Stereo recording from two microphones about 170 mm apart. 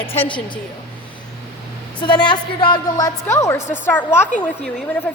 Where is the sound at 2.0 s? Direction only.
25° left (ahead or behind).